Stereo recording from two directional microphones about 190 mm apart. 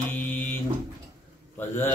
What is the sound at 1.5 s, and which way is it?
Speech, 10° left (ahead or behind).